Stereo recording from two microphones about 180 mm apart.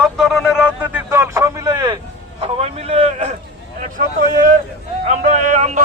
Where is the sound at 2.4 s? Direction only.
35° right (ahead or behind).